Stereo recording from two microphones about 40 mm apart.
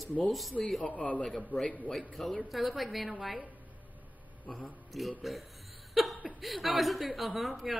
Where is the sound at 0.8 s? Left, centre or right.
Left.